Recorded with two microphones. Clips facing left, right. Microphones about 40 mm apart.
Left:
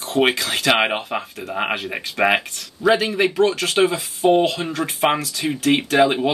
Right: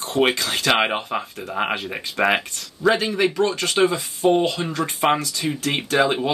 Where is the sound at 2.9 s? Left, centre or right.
Left.